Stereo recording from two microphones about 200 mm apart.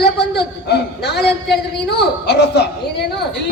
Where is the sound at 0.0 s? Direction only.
55° left (ahead or behind).